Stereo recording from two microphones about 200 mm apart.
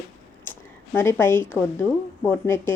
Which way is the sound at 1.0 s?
10° left (ahead or behind).